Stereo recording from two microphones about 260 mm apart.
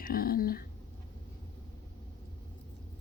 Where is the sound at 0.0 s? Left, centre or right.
Left.